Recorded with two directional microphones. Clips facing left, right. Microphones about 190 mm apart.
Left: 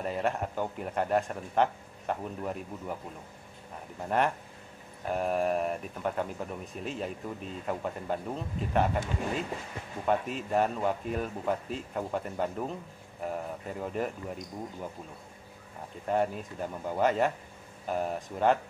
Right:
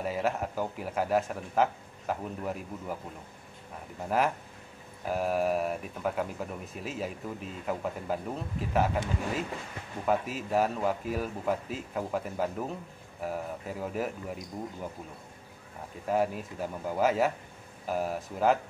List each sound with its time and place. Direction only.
0.0 s speech: 5° right (ahead or behind)
5.0 s speech: 5° right (ahead or behind)
10.0 s speech: 5° right (ahead or behind)
16.1 s speech: 5° right (ahead or behind)